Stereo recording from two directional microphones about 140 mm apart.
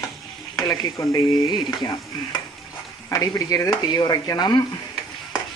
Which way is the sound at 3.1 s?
25° left (ahead or behind).